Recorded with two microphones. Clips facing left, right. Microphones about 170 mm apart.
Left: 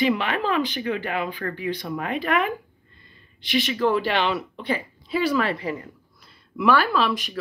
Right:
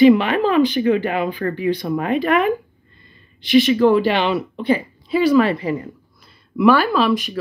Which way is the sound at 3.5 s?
20° right (ahead or behind).